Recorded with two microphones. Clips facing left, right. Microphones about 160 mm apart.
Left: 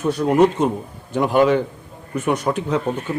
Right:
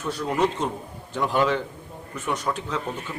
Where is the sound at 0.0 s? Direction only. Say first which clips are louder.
Left 9 dB; 20° left (ahead or behind).